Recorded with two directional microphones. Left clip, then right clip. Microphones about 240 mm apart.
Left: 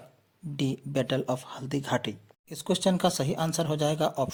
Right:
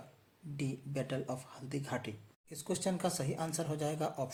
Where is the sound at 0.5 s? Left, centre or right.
Left.